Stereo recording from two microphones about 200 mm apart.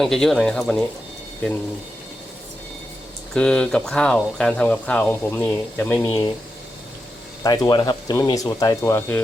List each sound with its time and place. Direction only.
0.0 s speech: centre (ahead or behind)
3.3 s speech: 5° left (ahead or behind)
7.4 s speech: 20° left (ahead or behind)